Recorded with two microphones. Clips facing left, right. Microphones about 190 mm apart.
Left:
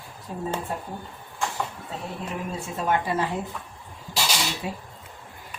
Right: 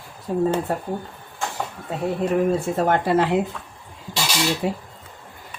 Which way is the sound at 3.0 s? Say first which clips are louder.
Right 8 dB; 80° right.